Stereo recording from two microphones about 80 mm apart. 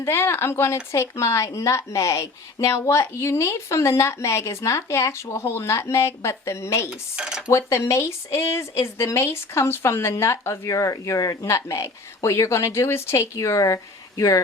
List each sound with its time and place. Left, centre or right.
0.0 s speech: left
7.2 s dishes: centre
7.4 s speech: left